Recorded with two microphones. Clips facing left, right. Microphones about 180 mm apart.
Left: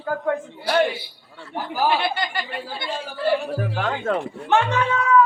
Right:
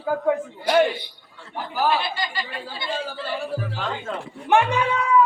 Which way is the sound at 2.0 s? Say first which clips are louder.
Left 4 dB; 60° left (ahead or behind).